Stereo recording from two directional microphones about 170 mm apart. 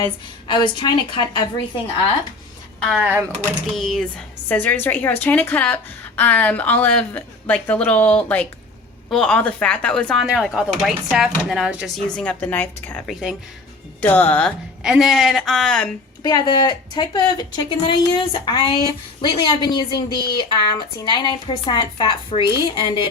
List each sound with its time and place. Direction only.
0.0 s a woman's voice: 25° left (ahead or behind)
2.8 s speech: 5° right (ahead or behind)
3.4 s speech: 5° left (ahead or behind)
13.1 s speech: centre (ahead or behind)
14.0 s speech: 10° left (ahead or behind)
14.8 s speech: centre (ahead or behind)
16.2 s a woman's voice: 25° left (ahead or behind)